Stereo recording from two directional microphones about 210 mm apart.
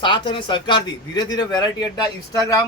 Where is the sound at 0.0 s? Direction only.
20° left (ahead or behind).